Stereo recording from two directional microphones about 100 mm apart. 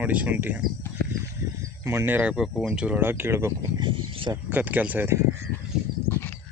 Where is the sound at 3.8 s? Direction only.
55° right (ahead or behind).